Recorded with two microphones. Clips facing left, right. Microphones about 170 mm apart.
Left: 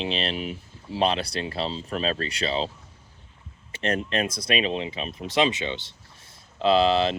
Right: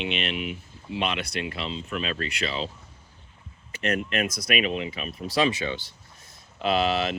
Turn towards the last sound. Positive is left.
turn(degrees=30)  # may be behind; listen again after turning